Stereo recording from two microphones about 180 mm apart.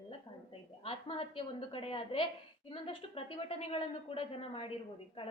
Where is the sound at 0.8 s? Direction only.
30° left (ahead or behind).